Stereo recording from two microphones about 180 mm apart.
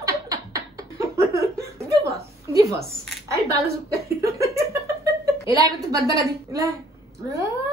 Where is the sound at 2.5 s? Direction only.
20° right (ahead or behind).